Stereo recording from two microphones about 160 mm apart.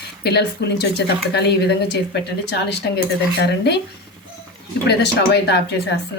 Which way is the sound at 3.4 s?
90° left.